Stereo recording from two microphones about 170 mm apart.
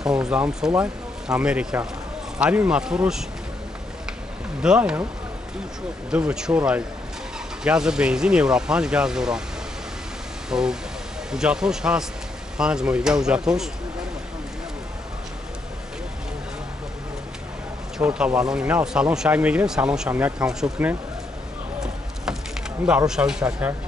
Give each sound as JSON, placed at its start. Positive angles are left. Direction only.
{"t": 0.0, "sound": "speech", "side_deg": -5}
{"t": 4.6, "sound": "speech", "side_deg": -5}
{"t": 6.0, "sound": "speech", "side_deg": -5}
{"t": 10.5, "sound": "speech", "side_deg": -5}
{"t": 17.9, "sound": "speech", "side_deg": -5}
{"t": 22.8, "sound": "speech", "side_deg": -5}